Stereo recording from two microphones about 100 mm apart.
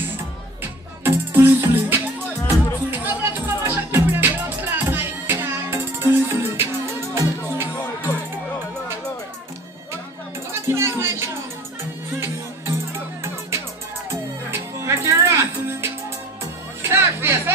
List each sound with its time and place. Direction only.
1.0 s music: 20° right (ahead or behind)
10.5 s music: 25° right (ahead or behind)
14.5 s music: 30° right (ahead or behind)